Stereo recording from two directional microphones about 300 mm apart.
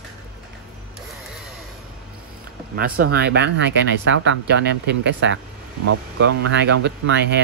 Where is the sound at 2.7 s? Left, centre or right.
Right.